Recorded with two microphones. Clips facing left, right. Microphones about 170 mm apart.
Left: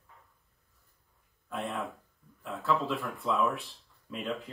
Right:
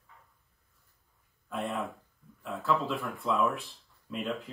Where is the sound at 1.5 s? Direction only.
Centre (ahead or behind).